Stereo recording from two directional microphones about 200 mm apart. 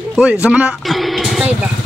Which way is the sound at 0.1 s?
5° right (ahead or behind).